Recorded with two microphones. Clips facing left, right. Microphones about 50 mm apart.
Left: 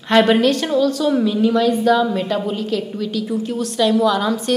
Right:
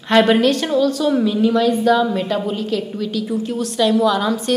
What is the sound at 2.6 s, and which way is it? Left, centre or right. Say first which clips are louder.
A woman's voice: even; right.